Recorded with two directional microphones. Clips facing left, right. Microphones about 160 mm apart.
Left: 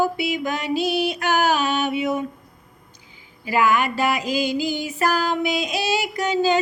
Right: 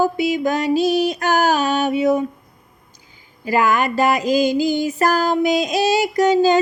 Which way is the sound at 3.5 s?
40° right (ahead or behind).